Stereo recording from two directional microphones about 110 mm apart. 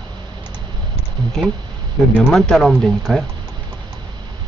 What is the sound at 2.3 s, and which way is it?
Speech, 5° left (ahead or behind).